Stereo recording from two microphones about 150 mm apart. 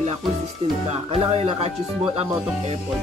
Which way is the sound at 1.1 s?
40° right (ahead or behind).